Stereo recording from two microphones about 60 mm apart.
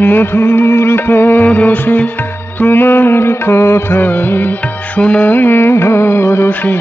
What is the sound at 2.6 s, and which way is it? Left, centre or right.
Music, left.